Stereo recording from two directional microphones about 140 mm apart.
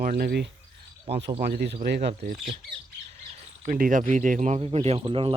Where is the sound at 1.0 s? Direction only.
45° right (ahead or behind).